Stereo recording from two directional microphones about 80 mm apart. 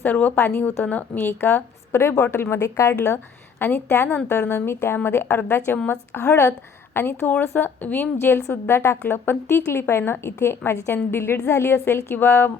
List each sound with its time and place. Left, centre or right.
0.0 s a woman's voice: left